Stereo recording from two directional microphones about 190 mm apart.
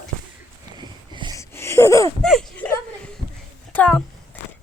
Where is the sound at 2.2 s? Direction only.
Centre (ahead or behind).